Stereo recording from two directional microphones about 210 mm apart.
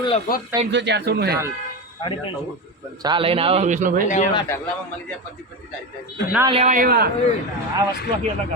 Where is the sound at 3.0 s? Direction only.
25° right (ahead or behind); by 4.0 s 40° right (ahead or behind).